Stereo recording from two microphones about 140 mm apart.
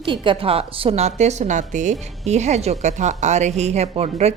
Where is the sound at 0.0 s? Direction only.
35° right (ahead or behind).